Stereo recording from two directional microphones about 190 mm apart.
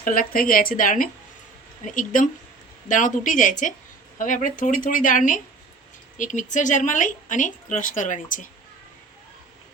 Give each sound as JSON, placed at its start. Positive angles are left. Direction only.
{"t": 0.0, "sound": "speech", "side_deg": 45}